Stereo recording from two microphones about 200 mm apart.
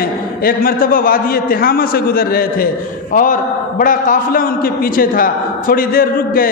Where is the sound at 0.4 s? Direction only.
45° left (ahead or behind).